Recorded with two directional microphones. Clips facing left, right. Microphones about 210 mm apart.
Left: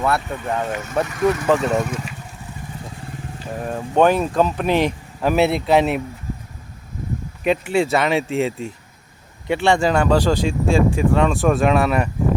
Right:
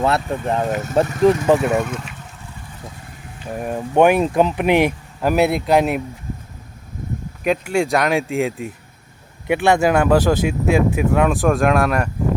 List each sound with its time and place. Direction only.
0.0 s speech: 30° right (ahead or behind)
1.5 s speech: 15° right (ahead or behind)
1.9 s speech: 5° left (ahead or behind)
3.6 s speech: 15° right (ahead or behind)
7.4 s speech: 5° right (ahead or behind)